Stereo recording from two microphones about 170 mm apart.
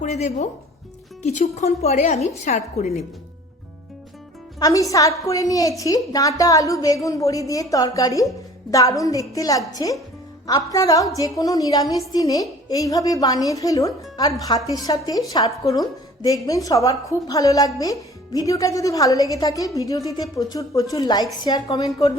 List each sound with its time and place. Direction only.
0.0 s a woman's voice: 40° left (ahead or behind)
4.6 s a woman's voice: 20° left (ahead or behind)